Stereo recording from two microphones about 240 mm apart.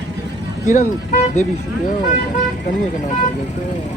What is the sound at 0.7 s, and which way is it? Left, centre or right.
Speech, left.